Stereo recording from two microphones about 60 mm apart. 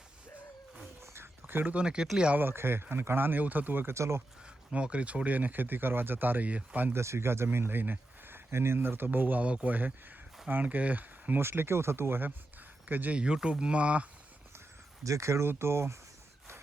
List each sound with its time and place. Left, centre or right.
1.0 s a sound: right
1.7 s speech: centre
2.3 s speech: right
3.9 s speech: right
4.4 s speech: centre
6.9 s speech: right
11.3 s speech: right
13.1 s speech: centre
15.0 s speech: right